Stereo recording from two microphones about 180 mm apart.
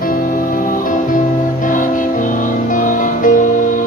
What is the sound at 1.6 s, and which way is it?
Music, 45° left (ahead or behind).